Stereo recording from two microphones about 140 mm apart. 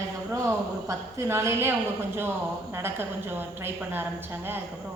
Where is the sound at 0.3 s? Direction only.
20° right (ahead or behind).